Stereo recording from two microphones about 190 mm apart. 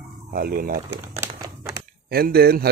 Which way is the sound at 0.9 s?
15° right (ahead or behind).